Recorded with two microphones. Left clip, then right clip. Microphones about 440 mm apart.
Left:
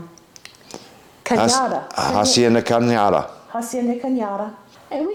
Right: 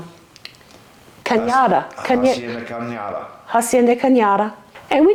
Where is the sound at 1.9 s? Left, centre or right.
Left.